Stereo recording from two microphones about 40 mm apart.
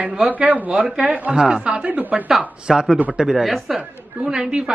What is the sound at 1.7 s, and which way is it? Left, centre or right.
Speech, right.